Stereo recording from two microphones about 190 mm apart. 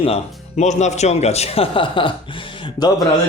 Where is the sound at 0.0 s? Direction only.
35° left (ahead or behind).